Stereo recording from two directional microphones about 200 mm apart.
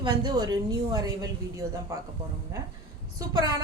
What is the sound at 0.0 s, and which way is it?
A woman's voice, 20° right (ahead or behind).